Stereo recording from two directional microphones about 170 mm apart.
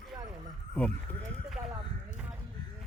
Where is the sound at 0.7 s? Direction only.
10° left (ahead or behind).